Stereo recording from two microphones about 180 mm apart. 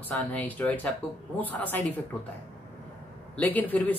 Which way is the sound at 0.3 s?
10° left (ahead or behind).